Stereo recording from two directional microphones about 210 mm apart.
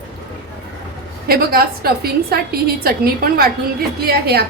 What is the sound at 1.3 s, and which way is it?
A woman's voice, 45° right (ahead or behind).